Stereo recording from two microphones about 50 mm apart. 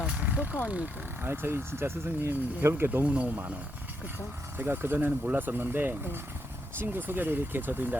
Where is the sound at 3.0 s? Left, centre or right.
Right.